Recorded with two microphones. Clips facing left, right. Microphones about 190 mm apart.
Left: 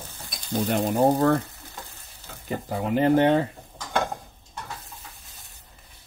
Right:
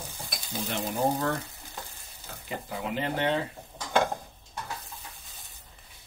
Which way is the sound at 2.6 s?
45° left (ahead or behind).